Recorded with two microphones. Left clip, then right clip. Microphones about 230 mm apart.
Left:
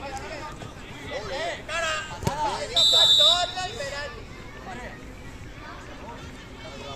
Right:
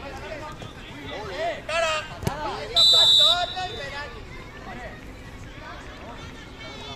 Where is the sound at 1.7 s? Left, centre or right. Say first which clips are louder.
Right 4 dB; right.